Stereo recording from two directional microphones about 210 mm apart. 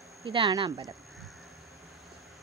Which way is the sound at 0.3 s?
25° right (ahead or behind).